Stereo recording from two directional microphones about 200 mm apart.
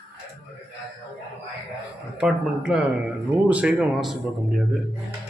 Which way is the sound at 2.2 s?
Centre (ahead or behind).